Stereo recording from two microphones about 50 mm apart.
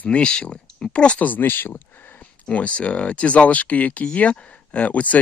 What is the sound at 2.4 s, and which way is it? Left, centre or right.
Speech, left.